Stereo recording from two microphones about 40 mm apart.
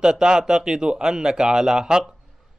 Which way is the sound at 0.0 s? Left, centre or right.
Centre.